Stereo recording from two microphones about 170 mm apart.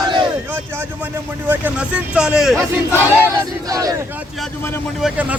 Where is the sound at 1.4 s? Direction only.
10° right (ahead or behind).